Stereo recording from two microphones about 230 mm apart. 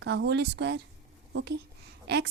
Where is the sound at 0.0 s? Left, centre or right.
Right.